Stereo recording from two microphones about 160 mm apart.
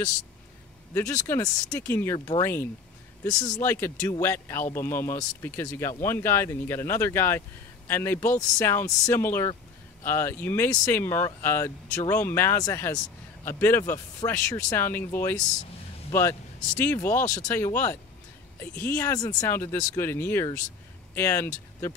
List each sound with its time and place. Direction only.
0.9 s a man's voice: 15° left (ahead or behind)
2.1 s speech: 25° left (ahead or behind)
2.4 s a man's voice: 15° left (ahead or behind)
3.7 s a man's voice: 10° left (ahead or behind)